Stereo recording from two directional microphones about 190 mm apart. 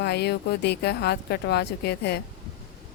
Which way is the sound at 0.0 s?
60° left (ahead or behind).